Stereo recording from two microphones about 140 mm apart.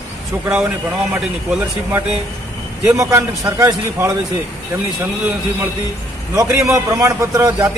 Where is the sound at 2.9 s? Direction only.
20° right (ahead or behind).